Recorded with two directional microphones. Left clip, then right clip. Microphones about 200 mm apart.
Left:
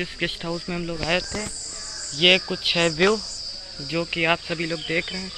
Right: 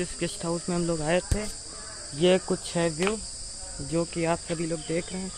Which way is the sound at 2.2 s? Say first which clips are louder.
Left 5 dB; 20° right (ahead or behind).